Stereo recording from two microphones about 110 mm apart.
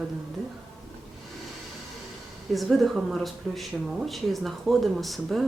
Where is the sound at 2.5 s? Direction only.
Centre (ahead or behind).